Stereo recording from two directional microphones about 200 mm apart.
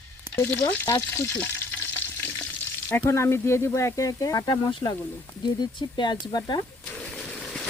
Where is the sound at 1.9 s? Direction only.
10° left (ahead or behind).